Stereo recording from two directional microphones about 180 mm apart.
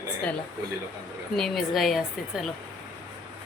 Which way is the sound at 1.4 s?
Centre (ahead or behind).